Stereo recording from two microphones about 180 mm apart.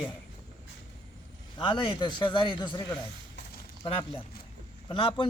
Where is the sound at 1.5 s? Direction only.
25° left (ahead or behind).